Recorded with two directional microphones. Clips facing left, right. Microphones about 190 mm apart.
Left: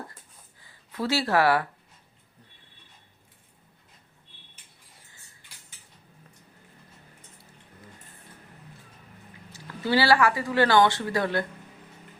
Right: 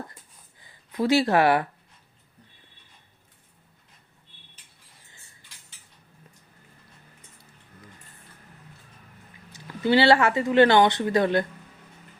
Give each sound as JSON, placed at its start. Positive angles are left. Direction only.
{"t": 0.6, "sound": "speech", "side_deg": -15}
{"t": 9.5, "sound": "speech", "side_deg": -20}